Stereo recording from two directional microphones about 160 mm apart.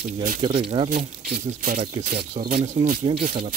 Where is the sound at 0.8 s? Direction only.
30° right (ahead or behind).